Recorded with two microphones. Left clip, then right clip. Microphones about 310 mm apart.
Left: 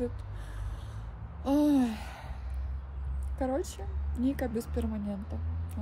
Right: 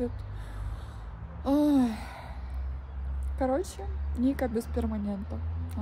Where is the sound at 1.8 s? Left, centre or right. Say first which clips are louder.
Right 2 dB; centre.